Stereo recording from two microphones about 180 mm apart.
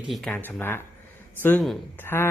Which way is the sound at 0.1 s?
Centre (ahead or behind).